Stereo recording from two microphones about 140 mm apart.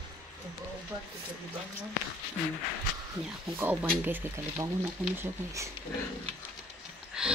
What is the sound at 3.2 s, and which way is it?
Speech, 10° right (ahead or behind).